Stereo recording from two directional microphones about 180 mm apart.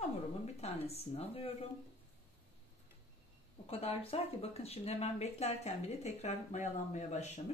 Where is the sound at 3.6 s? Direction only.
35° left (ahead or behind).